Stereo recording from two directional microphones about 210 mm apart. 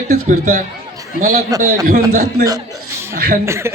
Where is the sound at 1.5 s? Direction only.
15° right (ahead or behind).